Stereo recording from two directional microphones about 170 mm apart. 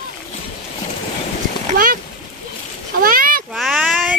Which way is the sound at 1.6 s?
55° right (ahead or behind).